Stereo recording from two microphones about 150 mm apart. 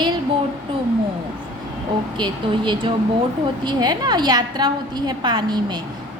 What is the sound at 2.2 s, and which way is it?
A woman's voice, 30° right (ahead or behind).